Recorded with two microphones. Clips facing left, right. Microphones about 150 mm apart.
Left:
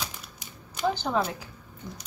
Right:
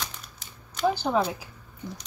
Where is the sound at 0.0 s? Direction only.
10° left (ahead or behind).